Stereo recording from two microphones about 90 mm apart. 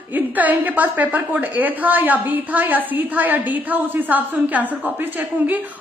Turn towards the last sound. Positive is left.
turn(degrees=-20)  # may be behind; listen again after turning